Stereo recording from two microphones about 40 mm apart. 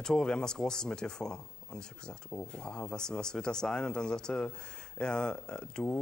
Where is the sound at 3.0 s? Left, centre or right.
Centre.